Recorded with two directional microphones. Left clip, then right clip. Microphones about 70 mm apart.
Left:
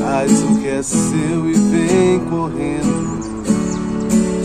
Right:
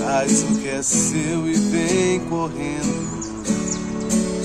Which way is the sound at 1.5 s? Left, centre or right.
Right.